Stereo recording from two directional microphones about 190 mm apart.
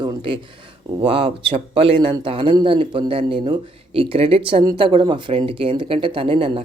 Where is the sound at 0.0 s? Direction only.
25° right (ahead or behind).